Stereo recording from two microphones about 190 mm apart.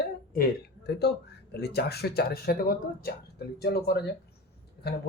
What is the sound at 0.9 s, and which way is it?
Speech, 60° left (ahead or behind).